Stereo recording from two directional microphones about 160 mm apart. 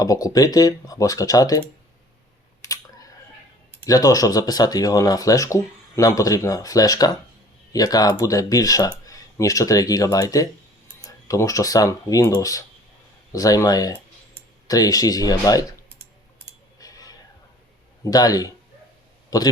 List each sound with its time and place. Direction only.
0.0 s speech: 20° left (ahead or behind)
3.8 s speech: 20° left (ahead or behind)
16.8 s a sound: 20° left (ahead or behind)
18.0 s speech: 25° left (ahead or behind)